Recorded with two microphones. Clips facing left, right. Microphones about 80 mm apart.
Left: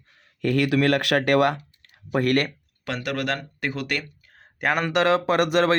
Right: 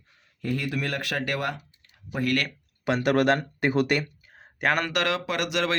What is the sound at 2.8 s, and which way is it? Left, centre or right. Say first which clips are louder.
Speech: right 6 dB; right.